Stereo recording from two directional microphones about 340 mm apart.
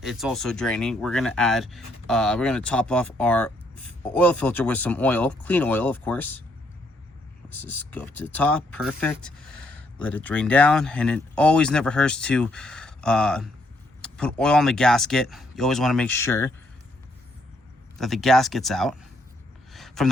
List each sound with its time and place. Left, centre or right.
0.0 s speech: centre
7.5 s speech: centre
17.9 s speech: centre
19.7 s a sound: centre